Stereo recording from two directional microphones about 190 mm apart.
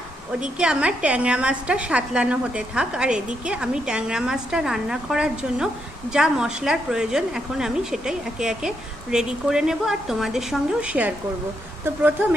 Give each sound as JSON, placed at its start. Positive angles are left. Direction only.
{"t": 0.6, "sound": "a woman's voice", "side_deg": -5}